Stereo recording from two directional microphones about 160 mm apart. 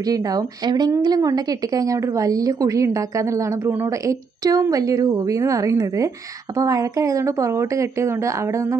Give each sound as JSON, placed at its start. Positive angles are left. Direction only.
{"t": 0.1, "sound": "a woman's voice", "side_deg": -25}